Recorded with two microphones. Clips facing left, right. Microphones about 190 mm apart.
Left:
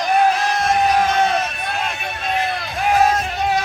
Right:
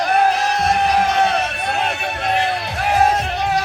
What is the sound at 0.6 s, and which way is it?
Music, 65° right (ahead or behind).